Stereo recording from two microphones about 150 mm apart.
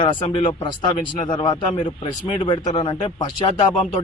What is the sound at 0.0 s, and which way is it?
A man's voice, 30° left (ahead or behind).